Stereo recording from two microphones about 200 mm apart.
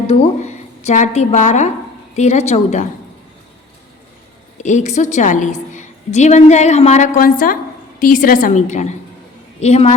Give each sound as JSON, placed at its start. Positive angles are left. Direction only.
{"t": 0.1, "sound": "a woman's voice", "side_deg": 35}
{"t": 4.5, "sound": "a woman's voice", "side_deg": 35}